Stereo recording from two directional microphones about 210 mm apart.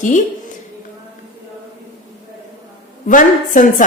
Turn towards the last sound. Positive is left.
turn(degrees=40)  # may be behind; listen again after turning